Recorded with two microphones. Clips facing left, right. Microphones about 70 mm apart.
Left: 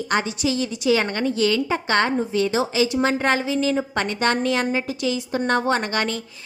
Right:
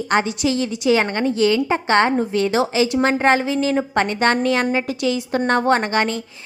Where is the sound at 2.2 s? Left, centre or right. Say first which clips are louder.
Right 3 dB; right.